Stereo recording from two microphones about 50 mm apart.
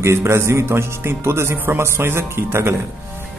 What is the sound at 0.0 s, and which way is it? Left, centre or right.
Speech, right.